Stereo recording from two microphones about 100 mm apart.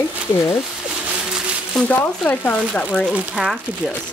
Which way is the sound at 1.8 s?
15° left (ahead or behind).